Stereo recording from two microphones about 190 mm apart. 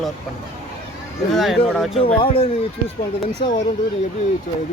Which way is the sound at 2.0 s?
30° left (ahead or behind).